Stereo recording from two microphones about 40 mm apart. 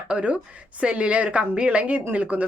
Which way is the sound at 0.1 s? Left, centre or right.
Right.